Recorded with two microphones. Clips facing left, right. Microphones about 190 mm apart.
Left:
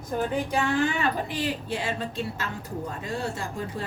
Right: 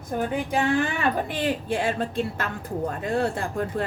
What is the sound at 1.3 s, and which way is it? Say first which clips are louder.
A woman's voice: right 4 dB; 55° right (ahead or behind).